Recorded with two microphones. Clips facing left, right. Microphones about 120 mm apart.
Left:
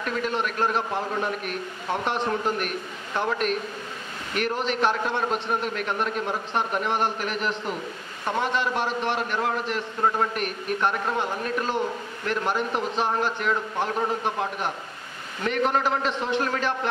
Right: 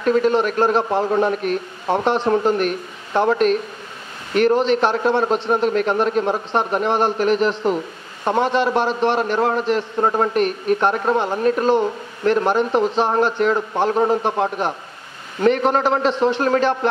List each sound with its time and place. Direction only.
0.0 s a man's voice: 35° right (ahead or behind)